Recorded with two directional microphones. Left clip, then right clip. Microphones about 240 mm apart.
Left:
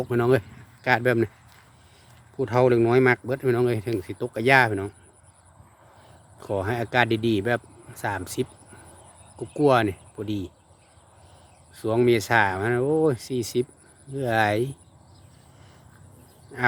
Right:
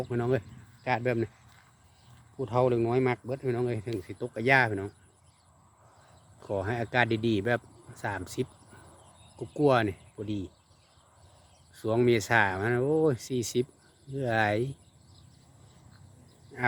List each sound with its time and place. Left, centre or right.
0.0 s speech: left
2.4 s speech: left
6.4 s a man's voice: centre
9.5 s a man's voice: centre
11.7 s a man's voice: centre